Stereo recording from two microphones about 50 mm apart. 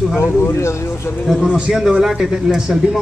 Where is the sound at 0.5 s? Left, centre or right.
Left.